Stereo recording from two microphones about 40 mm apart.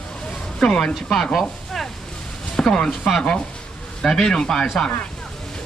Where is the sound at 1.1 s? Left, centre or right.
Centre.